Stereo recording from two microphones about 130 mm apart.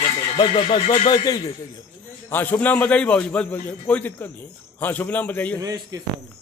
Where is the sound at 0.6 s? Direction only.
45° left (ahead or behind).